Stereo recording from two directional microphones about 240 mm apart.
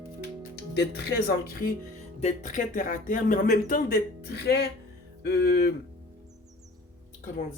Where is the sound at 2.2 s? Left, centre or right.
Left.